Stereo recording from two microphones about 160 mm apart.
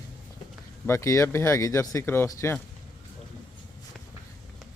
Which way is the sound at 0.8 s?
20° left (ahead or behind).